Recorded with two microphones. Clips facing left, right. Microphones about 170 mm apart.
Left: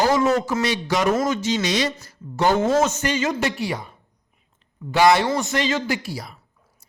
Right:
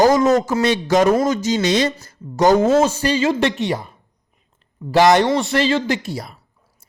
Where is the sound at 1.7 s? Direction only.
50° right (ahead or behind); by 3.8 s 25° right (ahead or behind).